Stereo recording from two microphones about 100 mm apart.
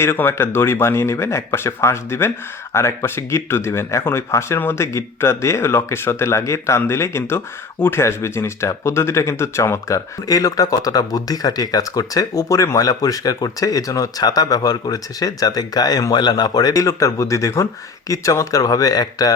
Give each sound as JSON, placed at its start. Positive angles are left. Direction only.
{"t": 0.0, "sound": "speech", "side_deg": 25}